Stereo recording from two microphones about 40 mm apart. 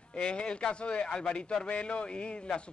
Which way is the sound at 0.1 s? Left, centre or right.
Left.